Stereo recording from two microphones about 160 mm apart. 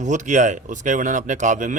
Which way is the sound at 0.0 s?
50° right (ahead or behind).